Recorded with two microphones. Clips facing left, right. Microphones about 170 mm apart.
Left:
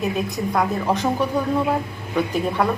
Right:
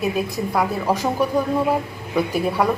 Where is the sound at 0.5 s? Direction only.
5° right (ahead or behind).